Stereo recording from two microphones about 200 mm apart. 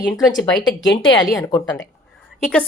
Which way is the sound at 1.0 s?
20° left (ahead or behind).